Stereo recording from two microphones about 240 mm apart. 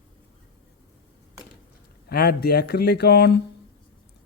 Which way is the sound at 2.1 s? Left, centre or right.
Left.